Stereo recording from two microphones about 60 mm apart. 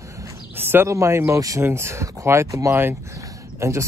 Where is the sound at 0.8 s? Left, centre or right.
Right.